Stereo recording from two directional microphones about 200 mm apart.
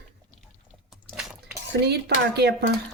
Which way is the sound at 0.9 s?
Centre (ahead or behind).